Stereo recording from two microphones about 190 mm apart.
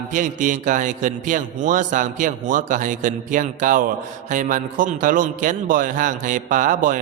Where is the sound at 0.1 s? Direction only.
45° right (ahead or behind).